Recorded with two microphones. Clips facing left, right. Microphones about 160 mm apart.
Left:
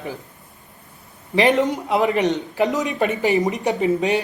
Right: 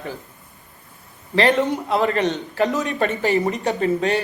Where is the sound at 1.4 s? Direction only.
15° left (ahead or behind).